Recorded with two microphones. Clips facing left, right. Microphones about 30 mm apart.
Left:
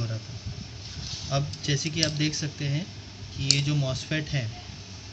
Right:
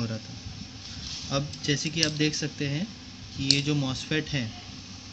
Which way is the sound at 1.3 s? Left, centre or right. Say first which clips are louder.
Right 1 dB; centre.